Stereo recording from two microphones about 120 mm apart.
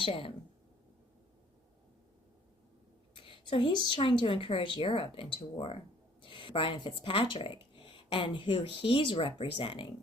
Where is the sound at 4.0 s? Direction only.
50° left (ahead or behind).